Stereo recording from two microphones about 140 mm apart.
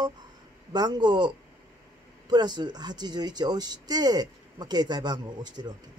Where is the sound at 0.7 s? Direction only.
30° right (ahead or behind).